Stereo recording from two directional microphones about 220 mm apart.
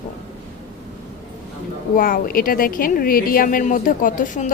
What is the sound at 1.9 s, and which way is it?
A woman's voice, 40° left (ahead or behind).